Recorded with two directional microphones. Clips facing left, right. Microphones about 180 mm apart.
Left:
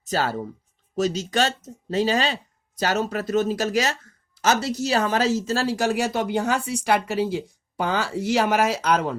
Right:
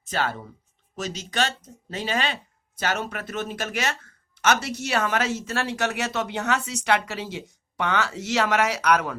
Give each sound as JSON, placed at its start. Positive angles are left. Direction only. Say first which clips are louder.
{"t": 0.0, "sound": "speech", "louder": "left 3 dB", "side_deg": 40}